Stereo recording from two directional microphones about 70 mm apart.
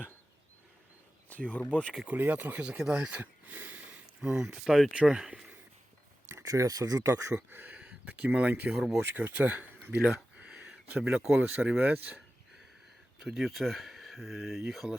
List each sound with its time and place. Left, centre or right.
1.3 s speech: left
2.0 s speech: right
2.6 s speech: centre
3.1 s speech: right
4.2 s speech: centre
6.4 s speech: right
7.0 s speech: right
7.3 s speech: right
8.7 s speech: centre
9.0 s speech: right
10.3 s a sound: centre
10.8 s speech: centre
13.2 s speech: centre